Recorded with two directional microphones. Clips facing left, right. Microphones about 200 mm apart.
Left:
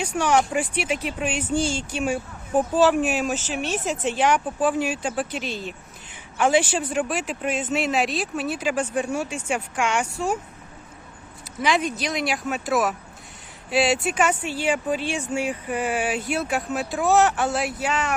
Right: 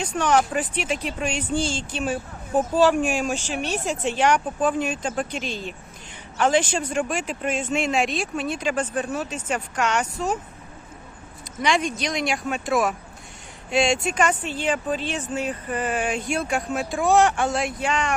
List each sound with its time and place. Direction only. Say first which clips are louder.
0.0 s speech: even; 10° left (ahead or behind)
3.6 s speech: even; 40° right (ahead or behind)
4.2 s speech: even; 5° left (ahead or behind)
11.6 s speech: even; 5° left (ahead or behind)